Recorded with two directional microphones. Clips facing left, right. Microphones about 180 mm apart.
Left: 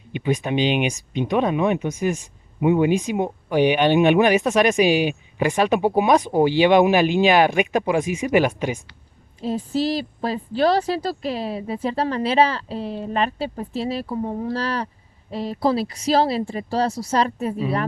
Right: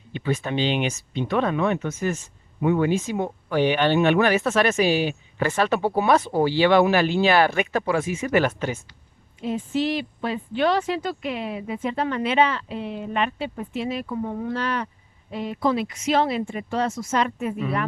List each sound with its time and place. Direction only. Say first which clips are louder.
0.1 s speech: left 3 dB; 15° left (ahead or behind)
9.4 s speech: left 2 dB; 35° left (ahead or behind)